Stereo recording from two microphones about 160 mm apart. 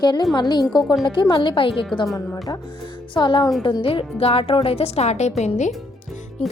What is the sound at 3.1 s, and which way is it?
A woman's voice, 30° left (ahead or behind).